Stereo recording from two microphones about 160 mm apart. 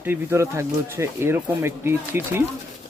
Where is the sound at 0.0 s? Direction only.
15° right (ahead or behind).